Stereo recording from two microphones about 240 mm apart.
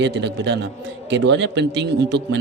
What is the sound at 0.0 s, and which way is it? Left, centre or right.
Speech, right.